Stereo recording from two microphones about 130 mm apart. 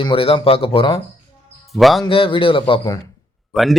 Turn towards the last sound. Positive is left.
turn(degrees=0)  # may be behind; listen again after turning